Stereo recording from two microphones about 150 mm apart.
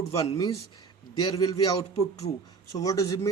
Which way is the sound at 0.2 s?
25° left (ahead or behind).